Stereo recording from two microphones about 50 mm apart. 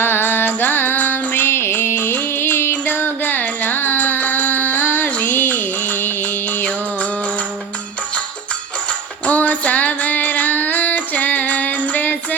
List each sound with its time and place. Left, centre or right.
0.0 s music: left
2.8 s music: left
9.2 s female singing: left